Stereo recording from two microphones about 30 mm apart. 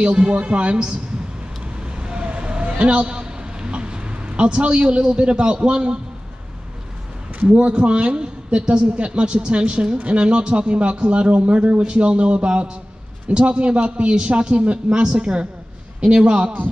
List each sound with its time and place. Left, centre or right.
0.0 s a man's voice: right
1.8 s vehicle: right
2.8 s a man's voice: right
7.4 s a man's voice: right